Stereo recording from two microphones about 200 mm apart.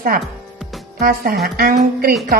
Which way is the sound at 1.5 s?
45° right (ahead or behind).